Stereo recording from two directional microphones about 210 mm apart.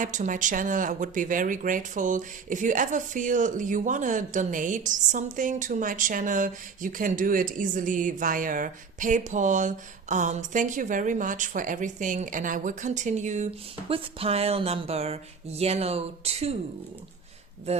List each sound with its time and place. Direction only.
0.0 s speech: 35° right (ahead or behind)